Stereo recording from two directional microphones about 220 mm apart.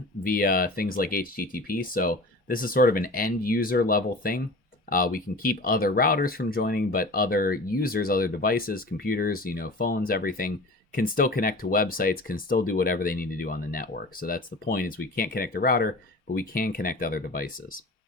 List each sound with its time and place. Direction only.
0.3 s speech: 40° left (ahead or behind)